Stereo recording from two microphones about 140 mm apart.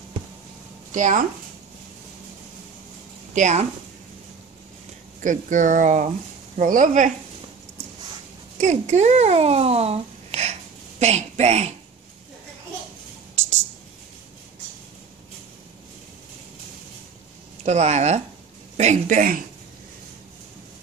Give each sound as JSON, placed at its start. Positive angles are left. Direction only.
{"t": 0.9, "sound": "speech", "side_deg": -65}
{"t": 3.3, "sound": "speech", "side_deg": -60}
{"t": 5.2, "sound": "speech", "side_deg": -65}
{"t": 8.5, "sound": "speech", "side_deg": -55}
{"t": 17.6, "sound": "speech", "side_deg": -55}